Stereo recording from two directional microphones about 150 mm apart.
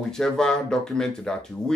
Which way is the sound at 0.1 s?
5° left (ahead or behind).